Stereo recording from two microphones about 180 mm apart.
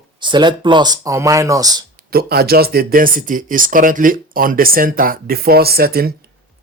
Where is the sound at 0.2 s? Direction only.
25° right (ahead or behind).